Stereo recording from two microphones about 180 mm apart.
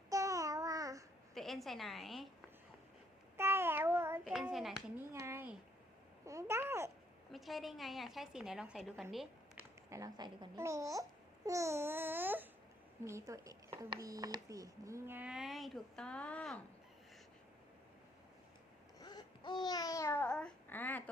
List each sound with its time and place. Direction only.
0.1 s babbling: 20° right (ahead or behind)
1.3 s a woman's voice: centre (ahead or behind)
3.3 s child singing: 15° right (ahead or behind)
4.2 s a child's voice: centre (ahead or behind)
4.9 s a sound: 15° right (ahead or behind)
6.2 s babbling: 15° right (ahead or behind)
7.3 s speech: centre (ahead or behind)
9.9 s speech: 20° right (ahead or behind)
11.4 s babbling: 15° right (ahead or behind)
14.0 s speech: 20° right (ahead or behind); by 16.6 s 5° left (ahead or behind)
18.9 s babbling: 25° left (ahead or behind)